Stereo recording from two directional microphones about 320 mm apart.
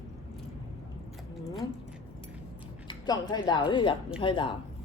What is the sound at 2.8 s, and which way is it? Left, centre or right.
A woman's voice, centre.